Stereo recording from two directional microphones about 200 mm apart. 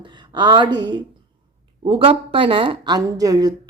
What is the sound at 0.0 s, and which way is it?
A woman's voice, 25° right (ahead or behind).